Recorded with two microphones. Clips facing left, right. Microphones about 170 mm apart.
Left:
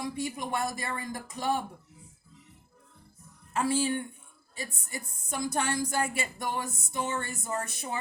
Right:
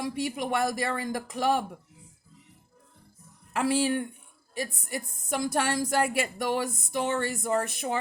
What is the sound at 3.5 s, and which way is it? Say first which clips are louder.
Speech: right 3 dB; 70° right (ahead or behind).